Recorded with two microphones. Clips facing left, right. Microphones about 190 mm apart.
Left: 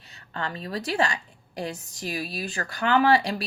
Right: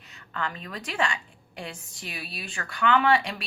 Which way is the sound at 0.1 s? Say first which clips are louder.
Left 1 dB; 35° left (ahead or behind).